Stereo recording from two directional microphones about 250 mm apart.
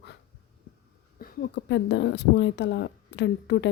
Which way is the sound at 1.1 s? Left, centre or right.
Left.